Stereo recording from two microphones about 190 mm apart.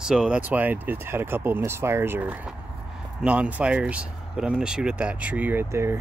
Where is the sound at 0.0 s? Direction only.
5° right (ahead or behind).